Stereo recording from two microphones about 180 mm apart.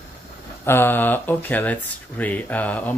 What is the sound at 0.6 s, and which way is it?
Speech, 15° left (ahead or behind).